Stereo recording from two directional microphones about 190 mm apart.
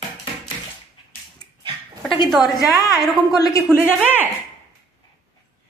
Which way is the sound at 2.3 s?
Centre (ahead or behind).